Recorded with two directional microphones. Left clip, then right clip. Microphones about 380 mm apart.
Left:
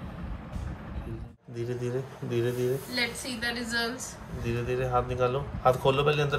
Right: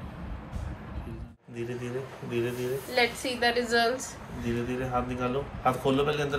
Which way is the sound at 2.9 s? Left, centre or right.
Centre.